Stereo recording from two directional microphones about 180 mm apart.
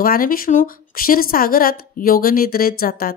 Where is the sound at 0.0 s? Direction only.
55° left (ahead or behind).